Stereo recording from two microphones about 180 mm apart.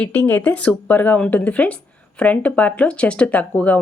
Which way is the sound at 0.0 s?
10° left (ahead or behind).